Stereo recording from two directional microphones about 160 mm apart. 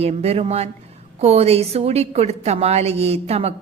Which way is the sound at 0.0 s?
40° right (ahead or behind).